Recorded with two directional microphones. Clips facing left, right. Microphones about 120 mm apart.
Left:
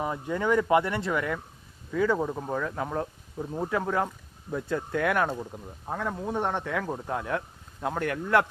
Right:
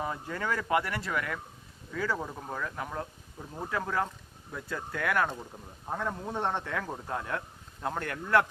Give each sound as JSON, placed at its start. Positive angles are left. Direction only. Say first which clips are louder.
{"t": 0.0, "sound": "speech", "louder": "left 5 dB", "side_deg": 20}